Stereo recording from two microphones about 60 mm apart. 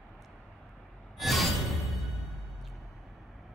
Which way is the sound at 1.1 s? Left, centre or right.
Centre.